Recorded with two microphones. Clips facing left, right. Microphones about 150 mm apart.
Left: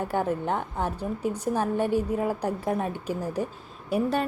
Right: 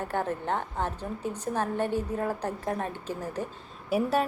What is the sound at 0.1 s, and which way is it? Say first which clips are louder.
A woman's voice: left 2 dB; 15° left (ahead or behind).